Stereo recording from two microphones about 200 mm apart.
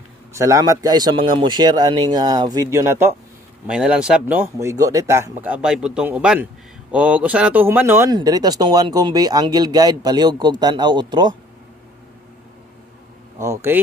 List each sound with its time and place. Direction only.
0.3 s a man's voice: 15° right (ahead or behind)
13.4 s speech: 15° right (ahead or behind)